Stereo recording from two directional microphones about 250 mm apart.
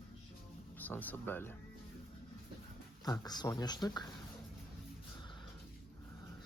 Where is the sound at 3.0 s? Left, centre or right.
Centre.